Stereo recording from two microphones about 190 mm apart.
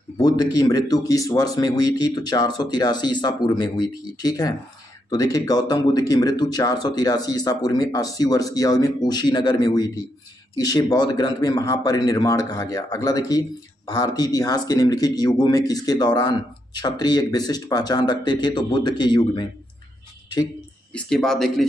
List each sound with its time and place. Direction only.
0.2 s speech: 20° left (ahead or behind)
20.9 s speech: 5° left (ahead or behind)